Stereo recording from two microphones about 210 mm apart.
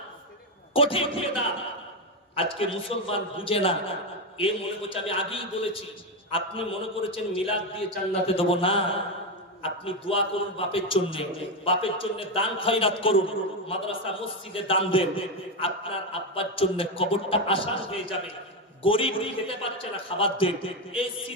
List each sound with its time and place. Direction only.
0.8 s a man's voice: 25° left (ahead or behind)